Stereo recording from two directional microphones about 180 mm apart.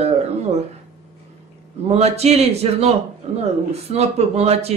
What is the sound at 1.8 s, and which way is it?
Speech, 35° right (ahead or behind).